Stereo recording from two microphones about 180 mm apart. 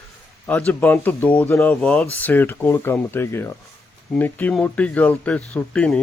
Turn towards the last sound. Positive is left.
turn(degrees=5)  # may be behind; listen again after turning